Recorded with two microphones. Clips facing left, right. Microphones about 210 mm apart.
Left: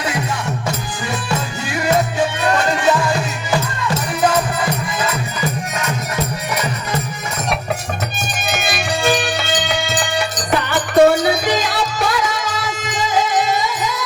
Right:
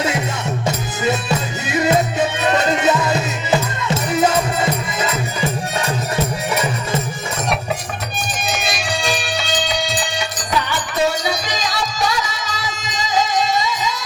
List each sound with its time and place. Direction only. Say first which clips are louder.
1.6 s music: right 1 dB; 20° right (ahead or behind)
8.4 s music: left 3 dB; 55° left (ahead or behind)